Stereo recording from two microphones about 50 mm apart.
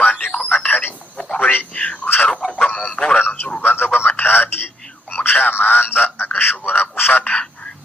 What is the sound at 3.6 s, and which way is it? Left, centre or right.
Radio, left.